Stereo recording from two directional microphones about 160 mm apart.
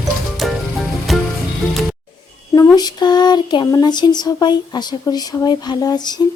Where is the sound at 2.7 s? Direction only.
25° left (ahead or behind).